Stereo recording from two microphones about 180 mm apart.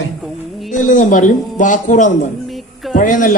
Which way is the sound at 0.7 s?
45° left (ahead or behind).